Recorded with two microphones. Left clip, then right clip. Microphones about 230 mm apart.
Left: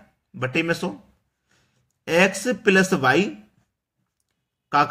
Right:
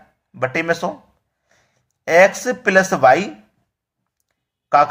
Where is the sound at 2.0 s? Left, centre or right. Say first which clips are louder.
Right 7 dB; centre.